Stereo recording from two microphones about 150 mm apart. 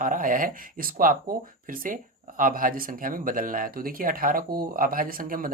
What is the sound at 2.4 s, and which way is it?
Speech, 65° right (ahead or behind).